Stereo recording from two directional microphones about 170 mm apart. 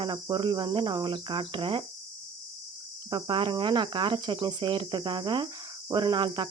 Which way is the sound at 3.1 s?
30° right (ahead or behind).